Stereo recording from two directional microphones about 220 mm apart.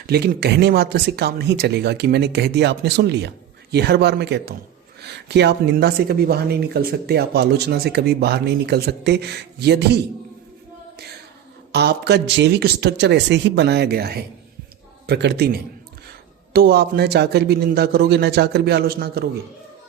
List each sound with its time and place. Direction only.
0.1 s speech: 45° right (ahead or behind)
11.7 s speech: 50° right (ahead or behind)